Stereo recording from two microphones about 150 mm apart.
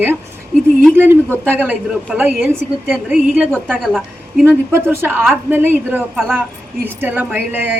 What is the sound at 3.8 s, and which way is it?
Speech, centre (ahead or behind).